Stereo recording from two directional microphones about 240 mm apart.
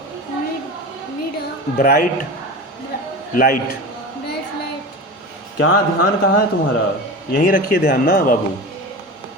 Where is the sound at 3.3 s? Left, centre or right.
Left.